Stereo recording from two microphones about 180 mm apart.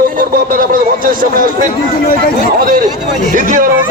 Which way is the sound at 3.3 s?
50° right (ahead or behind).